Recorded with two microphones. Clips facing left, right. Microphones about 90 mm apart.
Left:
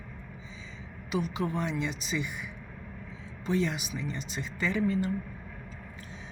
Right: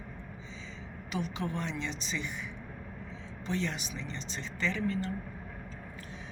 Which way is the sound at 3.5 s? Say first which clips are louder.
Left 5 dB; 10° left (ahead or behind).